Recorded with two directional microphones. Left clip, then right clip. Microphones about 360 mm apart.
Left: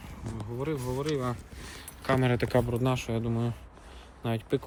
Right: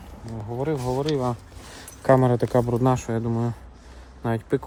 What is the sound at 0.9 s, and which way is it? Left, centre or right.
Speech, right.